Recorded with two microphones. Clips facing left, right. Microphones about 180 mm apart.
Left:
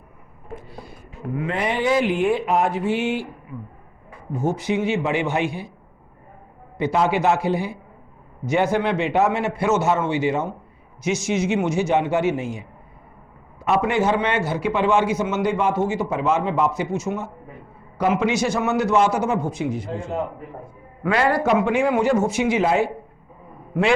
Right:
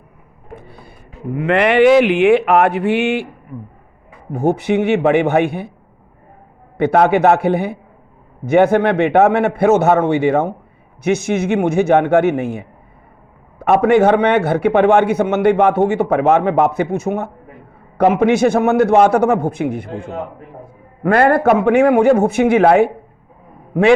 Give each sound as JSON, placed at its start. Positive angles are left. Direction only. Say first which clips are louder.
{"t": 1.4, "sound": "speech", "louder": "right 12 dB", "side_deg": -75}
{"t": 4.3, "sound": "a man's voice", "louder": "right 7 dB", "side_deg": -60}
{"t": 6.7, "sound": "a man's voice", "louder": "right 7 dB", "side_deg": -60}